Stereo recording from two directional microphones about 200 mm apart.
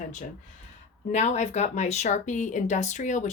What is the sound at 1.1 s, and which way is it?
Speech, 35° left (ahead or behind).